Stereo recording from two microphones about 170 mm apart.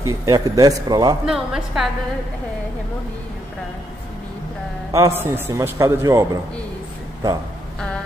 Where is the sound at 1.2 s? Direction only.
5° right (ahead or behind).